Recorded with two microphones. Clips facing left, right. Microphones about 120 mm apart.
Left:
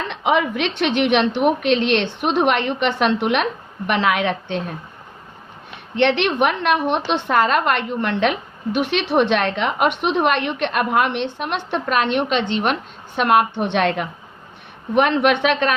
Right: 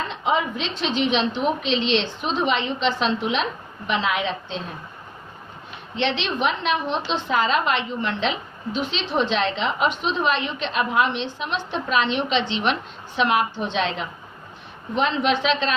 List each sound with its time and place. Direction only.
0.1 s a woman's voice: 70° left (ahead or behind)
6.0 s a woman's voice: 60° left (ahead or behind)